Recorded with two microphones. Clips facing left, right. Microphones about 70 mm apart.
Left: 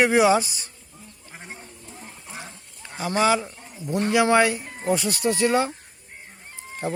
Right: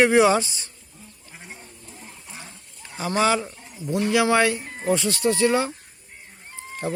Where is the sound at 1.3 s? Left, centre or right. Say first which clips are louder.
Left 2 dB; left.